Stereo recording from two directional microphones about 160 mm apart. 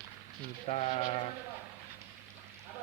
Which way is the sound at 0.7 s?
45° left (ahead or behind).